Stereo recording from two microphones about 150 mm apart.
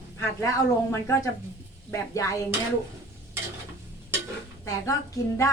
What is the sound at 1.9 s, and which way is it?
Speech, 20° left (ahead or behind).